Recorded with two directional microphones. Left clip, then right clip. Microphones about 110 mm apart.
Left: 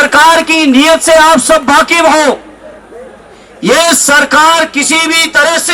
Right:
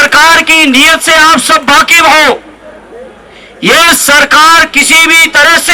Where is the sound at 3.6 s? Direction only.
30° right (ahead or behind).